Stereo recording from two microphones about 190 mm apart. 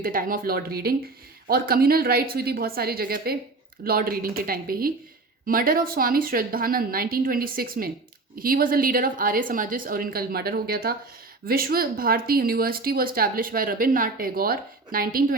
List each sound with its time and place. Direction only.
0.0 s speech: 50° right (ahead or behind)